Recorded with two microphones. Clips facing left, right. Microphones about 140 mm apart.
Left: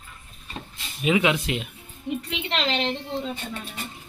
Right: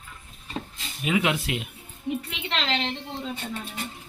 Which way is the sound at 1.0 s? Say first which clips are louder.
Left 3 dB; centre (ahead or behind).